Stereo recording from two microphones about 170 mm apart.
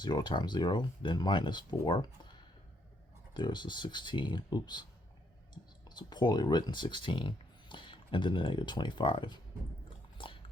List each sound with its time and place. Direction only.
0.0 s speech: 25° left (ahead or behind)
3.3 s speech: 25° left (ahead or behind)
5.9 s speech: 25° left (ahead or behind)
10.2 s dog: 30° left (ahead or behind)